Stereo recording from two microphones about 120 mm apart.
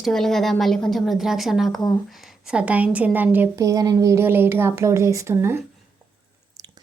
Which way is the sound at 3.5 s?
30° right (ahead or behind).